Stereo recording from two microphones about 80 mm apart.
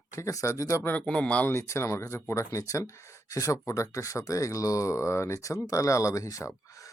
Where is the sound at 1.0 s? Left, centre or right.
Centre.